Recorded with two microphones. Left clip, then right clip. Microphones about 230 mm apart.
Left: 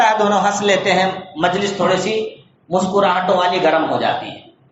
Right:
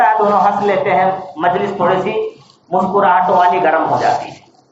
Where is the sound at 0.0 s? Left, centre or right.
Left.